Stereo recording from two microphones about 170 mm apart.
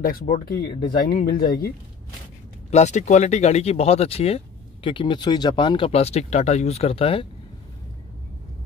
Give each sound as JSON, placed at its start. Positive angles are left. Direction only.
{"t": 0.0, "sound": "speech", "side_deg": 60}
{"t": 2.7, "sound": "speech", "side_deg": 45}